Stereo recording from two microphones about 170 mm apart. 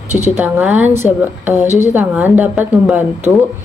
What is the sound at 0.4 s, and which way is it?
Speech, 10° right (ahead or behind).